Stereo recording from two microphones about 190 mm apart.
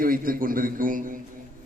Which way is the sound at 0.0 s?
50° right (ahead or behind).